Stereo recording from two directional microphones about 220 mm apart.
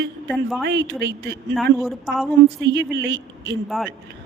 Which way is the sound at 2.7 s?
55° right (ahead or behind).